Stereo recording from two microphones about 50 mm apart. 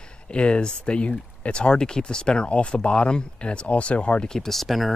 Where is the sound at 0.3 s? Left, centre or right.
Left.